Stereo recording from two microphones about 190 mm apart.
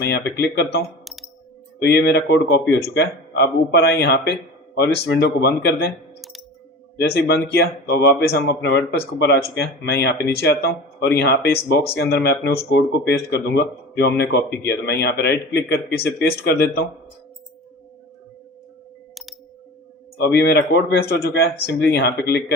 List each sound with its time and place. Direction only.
0.0 s speech: 60° left (ahead or behind)
1.0 s a sound: centre (ahead or behind)
1.8 s speech: 60° left (ahead or behind)
6.9 s speech: 60° left (ahead or behind)
20.1 s speech: 60° left (ahead or behind)